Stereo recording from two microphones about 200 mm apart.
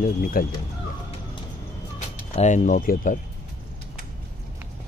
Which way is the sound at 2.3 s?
35° left (ahead or behind).